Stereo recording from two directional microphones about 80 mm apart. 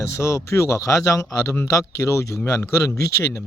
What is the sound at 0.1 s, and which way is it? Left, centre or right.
Speech, left.